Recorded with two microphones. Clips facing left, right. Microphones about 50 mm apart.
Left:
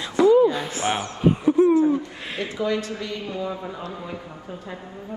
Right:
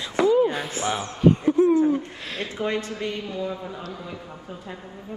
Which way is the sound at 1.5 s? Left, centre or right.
Left.